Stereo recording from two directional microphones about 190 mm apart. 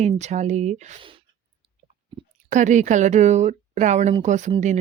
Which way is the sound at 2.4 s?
40° right (ahead or behind).